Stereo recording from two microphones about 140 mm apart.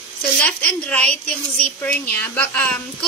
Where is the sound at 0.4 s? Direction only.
10° left (ahead or behind).